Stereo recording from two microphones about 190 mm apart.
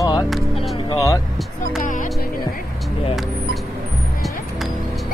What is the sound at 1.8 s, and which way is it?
Speech, 45° left (ahead or behind).